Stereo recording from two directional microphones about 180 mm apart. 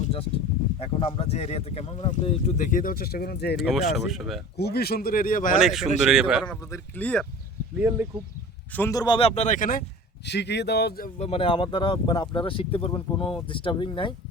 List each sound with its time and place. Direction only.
0.0 s a sound: 30° left (ahead or behind)
0.8 s speech: 30° left (ahead or behind); by 3.6 s 65° left (ahead or behind)
3.6 s speech: centre (ahead or behind)
4.5 s speech: 60° left (ahead or behind)
5.5 s speech: centre (ahead or behind)
6.7 s speech: 10° left (ahead or behind)
7.8 s speech: 10° right (ahead or behind)
8.7 s speech: 15° left (ahead or behind); by 9.8 s 50° left (ahead or behind)
10.2 s speech: 70° left (ahead or behind)
11.2 s speech: 30° left (ahead or behind)